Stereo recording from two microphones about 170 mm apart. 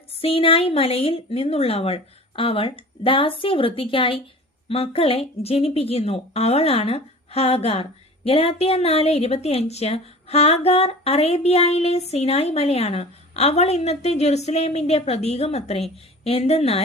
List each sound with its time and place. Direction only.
0.2 s a woman's voice: 35° left (ahead or behind)